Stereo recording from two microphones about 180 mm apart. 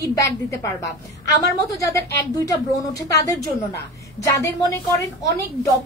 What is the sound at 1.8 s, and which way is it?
A woman's voice, 20° left (ahead or behind).